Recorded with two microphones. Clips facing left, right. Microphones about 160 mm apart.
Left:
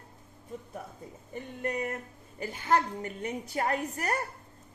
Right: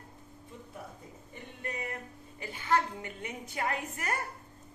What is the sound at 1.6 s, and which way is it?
Music, 45° left (ahead or behind).